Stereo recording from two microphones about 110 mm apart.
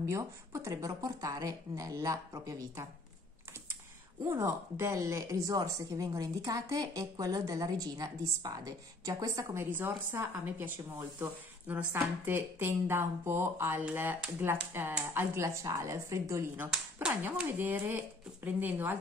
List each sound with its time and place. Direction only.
0.0 s a woman's voice: 30° right (ahead or behind)
4.3 s a woman's voice: 25° right (ahead or behind)
17.2 s speech: 15° right (ahead or behind)